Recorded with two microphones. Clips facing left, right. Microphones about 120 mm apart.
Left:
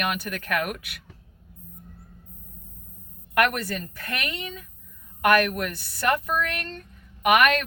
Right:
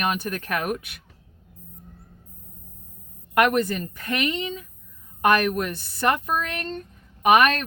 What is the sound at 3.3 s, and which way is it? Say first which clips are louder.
Speech: right 4 dB; 25° right (ahead or behind).